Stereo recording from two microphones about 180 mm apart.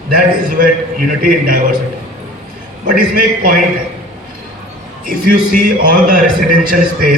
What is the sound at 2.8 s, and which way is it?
Speech, 50° right (ahead or behind).